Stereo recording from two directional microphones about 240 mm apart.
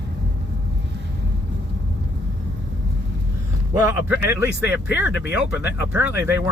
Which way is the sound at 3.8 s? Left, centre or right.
Centre.